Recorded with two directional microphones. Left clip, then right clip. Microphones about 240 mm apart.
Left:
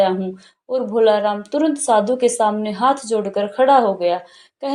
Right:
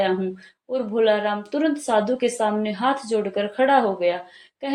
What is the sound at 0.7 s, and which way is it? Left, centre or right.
A woman's voice, left.